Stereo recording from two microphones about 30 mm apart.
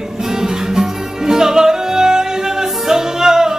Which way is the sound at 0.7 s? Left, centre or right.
Centre.